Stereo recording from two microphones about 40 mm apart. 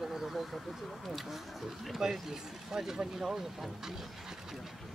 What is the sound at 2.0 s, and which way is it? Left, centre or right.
Speech, centre.